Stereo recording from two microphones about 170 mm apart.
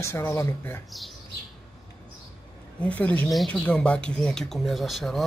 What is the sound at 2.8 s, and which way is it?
Speech, 10° left (ahead or behind).